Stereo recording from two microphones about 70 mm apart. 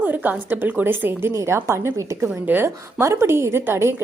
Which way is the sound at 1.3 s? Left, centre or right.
Right.